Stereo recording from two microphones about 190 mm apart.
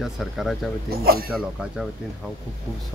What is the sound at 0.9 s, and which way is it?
Speech, 55° right (ahead or behind).